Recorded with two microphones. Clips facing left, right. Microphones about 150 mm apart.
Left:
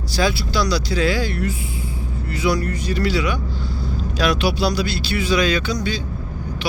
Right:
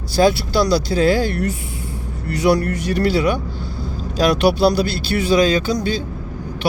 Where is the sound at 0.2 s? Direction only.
50° right (ahead or behind).